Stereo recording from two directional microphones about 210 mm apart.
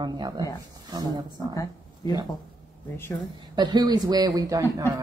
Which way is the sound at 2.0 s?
20° left (ahead or behind).